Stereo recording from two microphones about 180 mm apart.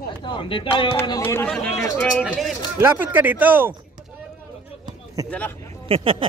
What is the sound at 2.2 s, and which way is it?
Speech, centre (ahead or behind).